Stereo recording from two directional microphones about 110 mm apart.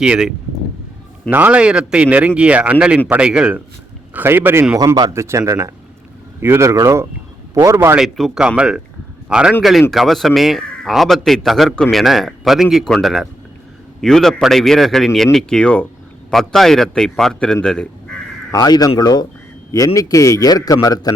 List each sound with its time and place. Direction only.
0.0 s a man's voice: 5° right (ahead or behind); by 7.9 s 25° right (ahead or behind)
7.9 s a man's voice: centre (ahead or behind)
18.5 s a man's voice: 35° left (ahead or behind)